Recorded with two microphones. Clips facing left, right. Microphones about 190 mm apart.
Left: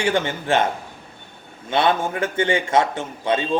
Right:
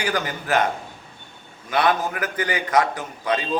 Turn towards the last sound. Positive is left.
turn(degrees=25)  # may be behind; listen again after turning